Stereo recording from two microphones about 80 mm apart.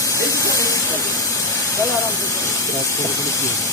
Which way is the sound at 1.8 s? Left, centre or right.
Left.